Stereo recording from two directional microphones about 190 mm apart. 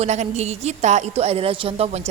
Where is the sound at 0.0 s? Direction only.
35° right (ahead or behind).